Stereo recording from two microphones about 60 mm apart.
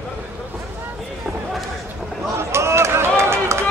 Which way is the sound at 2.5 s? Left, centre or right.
Right.